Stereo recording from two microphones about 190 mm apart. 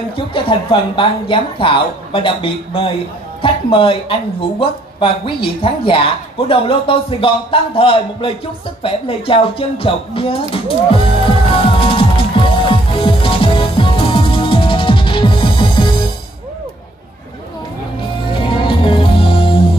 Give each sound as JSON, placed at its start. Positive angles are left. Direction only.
{"t": 0.1, "sound": "speech", "side_deg": 25}
{"t": 10.5, "sound": "music", "side_deg": 30}
{"t": 18.3, "sound": "music", "side_deg": 25}